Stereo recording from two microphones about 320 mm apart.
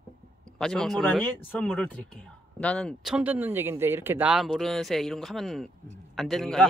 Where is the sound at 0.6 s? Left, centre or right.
Centre.